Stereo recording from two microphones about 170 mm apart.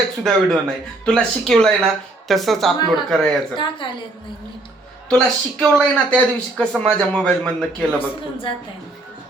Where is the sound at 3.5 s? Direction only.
30° left (ahead or behind).